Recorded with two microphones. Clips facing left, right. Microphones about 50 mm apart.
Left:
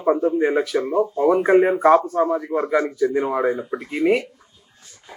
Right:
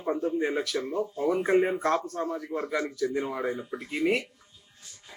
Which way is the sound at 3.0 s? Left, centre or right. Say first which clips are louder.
Left 9 dB; left.